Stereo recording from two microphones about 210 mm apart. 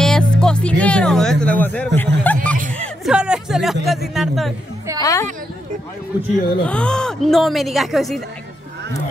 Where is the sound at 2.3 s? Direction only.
10° left (ahead or behind).